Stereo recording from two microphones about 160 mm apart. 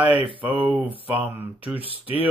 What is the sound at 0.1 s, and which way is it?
Speech, 35° right (ahead or behind).